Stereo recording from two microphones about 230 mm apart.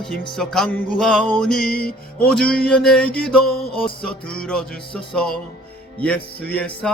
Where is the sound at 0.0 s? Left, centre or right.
Centre.